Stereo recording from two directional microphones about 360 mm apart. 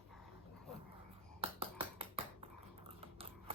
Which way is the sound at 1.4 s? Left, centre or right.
Centre.